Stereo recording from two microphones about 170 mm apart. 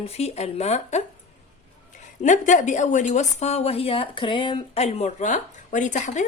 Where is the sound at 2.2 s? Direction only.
45° left (ahead or behind).